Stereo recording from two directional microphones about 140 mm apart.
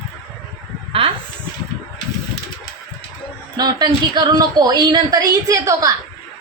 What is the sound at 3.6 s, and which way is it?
A woman's voice, 30° right (ahead or behind).